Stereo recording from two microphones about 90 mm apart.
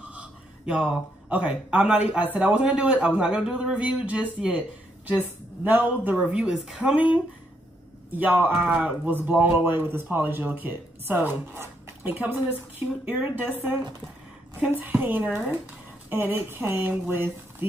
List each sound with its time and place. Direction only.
0.0 s speech: 15° right (ahead or behind)
8.1 s a man's voice: 20° right (ahead or behind)
17.1 s a sound: 25° right (ahead or behind)